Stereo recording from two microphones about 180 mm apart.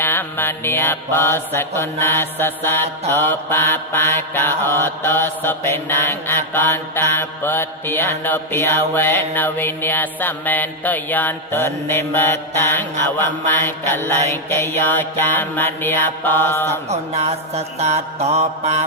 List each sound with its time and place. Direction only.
0.0 s mantra: 10° left (ahead or behind)
16.9 s mantra: 35° right (ahead or behind)